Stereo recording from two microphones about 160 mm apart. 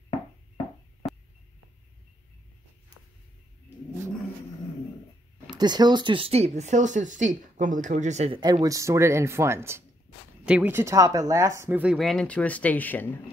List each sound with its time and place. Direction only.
5.5 s speech: 25° right (ahead or behind); by 8.4 s 45° right (ahead or behind)
8.4 s speech: 25° right (ahead or behind); by 13.2 s 10° left (ahead or behind)